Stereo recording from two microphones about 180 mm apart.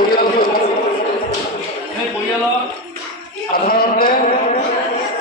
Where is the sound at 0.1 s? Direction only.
55° left (ahead or behind).